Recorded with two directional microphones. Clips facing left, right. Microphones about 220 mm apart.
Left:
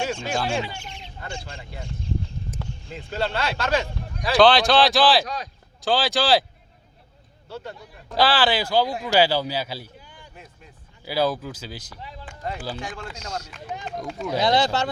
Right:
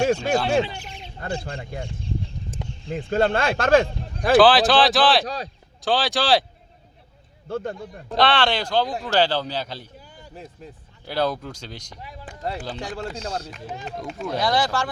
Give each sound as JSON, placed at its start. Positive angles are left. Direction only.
{"t": 0.0, "sound": "speech", "side_deg": -40}
{"t": 1.7, "sound": "speech", "side_deg": -50}
{"t": 2.6, "sound": "a sound", "side_deg": -20}
{"t": 2.9, "sound": "speech", "side_deg": -50}
{"t": 4.4, "sound": "speech", "side_deg": -5}
{"t": 5.2, "sound": "speech", "side_deg": -35}
{"t": 5.8, "sound": "speech", "side_deg": 0}
{"t": 7.4, "sound": "speech", "side_deg": -50}
{"t": 8.1, "sound": "a man's voice", "side_deg": 5}
{"t": 10.0, "sound": "a sound", "side_deg": -40}
{"t": 11.0, "sound": "speech", "side_deg": 5}
{"t": 12.2, "sound": "speech", "side_deg": -40}
{"t": 14.3, "sound": "speech", "side_deg": 25}